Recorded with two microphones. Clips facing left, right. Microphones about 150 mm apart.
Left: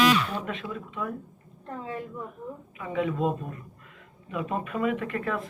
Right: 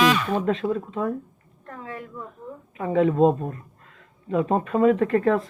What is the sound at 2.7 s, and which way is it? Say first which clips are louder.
A woman's voice: right 9 dB; 35° right (ahead or behind).